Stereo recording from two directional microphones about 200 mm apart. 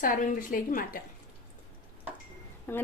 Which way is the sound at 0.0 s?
40° left (ahead or behind).